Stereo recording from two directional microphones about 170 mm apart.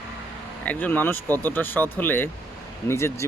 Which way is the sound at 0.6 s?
10° left (ahead or behind).